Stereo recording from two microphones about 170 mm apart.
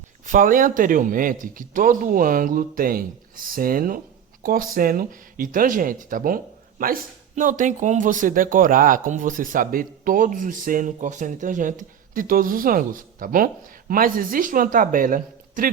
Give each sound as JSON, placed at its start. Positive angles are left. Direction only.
{"t": 0.3, "sound": "speech", "side_deg": -50}